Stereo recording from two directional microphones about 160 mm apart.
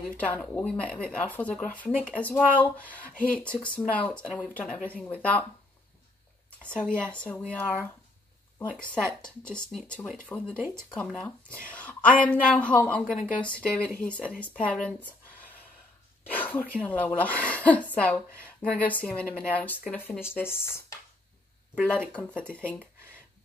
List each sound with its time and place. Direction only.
0.2 s speech: 10° left (ahead or behind)
6.6 s speech: 5° left (ahead or behind)
22.2 s speech: 15° left (ahead or behind)